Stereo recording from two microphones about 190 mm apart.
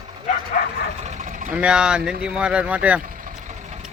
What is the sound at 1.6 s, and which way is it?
Speech, 5° right (ahead or behind).